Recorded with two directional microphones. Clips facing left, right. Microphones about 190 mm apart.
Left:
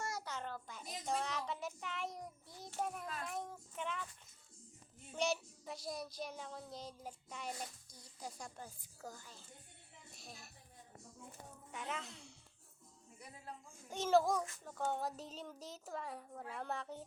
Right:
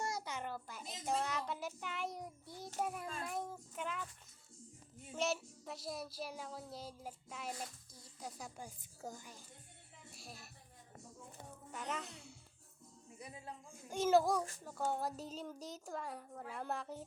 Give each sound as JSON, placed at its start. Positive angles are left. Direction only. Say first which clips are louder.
{"t": 0.0, "sound": "a sound", "louder": "right 2 dB", "side_deg": -15}
{"t": 1.0, "sound": "child singing", "louder": "right 2 dB", "side_deg": 0}
{"t": 5.1, "sound": "child singing", "louder": "even", "side_deg": 0}
{"t": 9.0, "sound": "a woman's voice", "louder": "right 3 dB", "side_deg": -20}
{"t": 10.2, "sound": "speech", "louder": "right 1 dB", "side_deg": -5}
{"t": 11.7, "sound": "a woman's voice", "louder": "right 1 dB", "side_deg": 0}
{"t": 13.1, "sound": "speech", "louder": "right 4 dB", "side_deg": -20}
{"t": 13.9, "sound": "child singing", "louder": "right 1 dB", "side_deg": -5}